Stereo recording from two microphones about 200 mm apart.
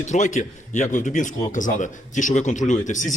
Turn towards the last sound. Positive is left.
turn(degrees=40)  # may be behind; listen again after turning